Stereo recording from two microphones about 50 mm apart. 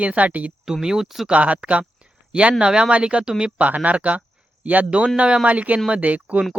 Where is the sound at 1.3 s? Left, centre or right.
Right.